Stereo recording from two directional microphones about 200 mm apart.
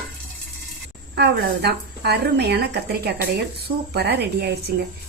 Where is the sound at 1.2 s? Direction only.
55° right (ahead or behind).